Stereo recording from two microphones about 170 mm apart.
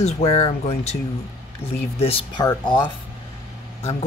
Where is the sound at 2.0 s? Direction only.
35° left (ahead or behind).